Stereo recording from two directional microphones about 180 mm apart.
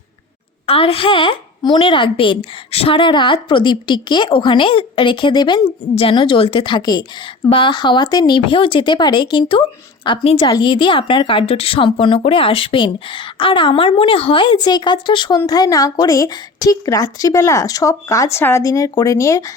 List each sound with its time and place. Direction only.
0.7 s speech: 30° left (ahead or behind)